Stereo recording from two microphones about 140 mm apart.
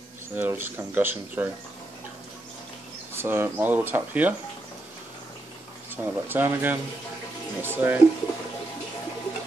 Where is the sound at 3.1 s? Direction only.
15° right (ahead or behind).